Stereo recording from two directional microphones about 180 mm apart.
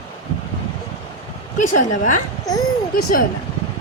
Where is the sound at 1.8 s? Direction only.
45° left (ahead or behind).